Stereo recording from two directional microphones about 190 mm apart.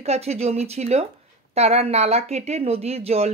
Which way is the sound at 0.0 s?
35° right (ahead or behind).